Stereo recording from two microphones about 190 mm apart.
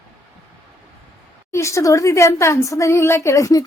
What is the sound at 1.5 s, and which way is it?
A woman's voice, 15° left (ahead or behind).